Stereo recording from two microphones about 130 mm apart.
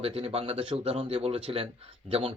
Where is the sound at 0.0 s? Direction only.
45° right (ahead or behind).